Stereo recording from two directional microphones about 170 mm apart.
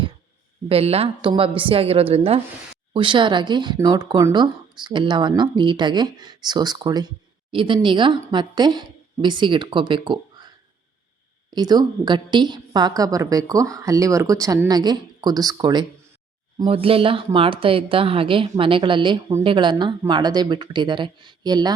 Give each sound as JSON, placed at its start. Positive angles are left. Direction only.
{"t": 0.7, "sound": "a woman's voice", "side_deg": -35}
{"t": 11.5, "sound": "a woman's voice", "side_deg": -25}